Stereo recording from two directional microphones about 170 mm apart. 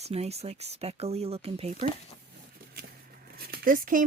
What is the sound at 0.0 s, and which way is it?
Speech, 40° right (ahead or behind).